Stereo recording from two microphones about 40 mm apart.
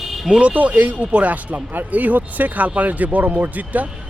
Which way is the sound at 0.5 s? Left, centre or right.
Right.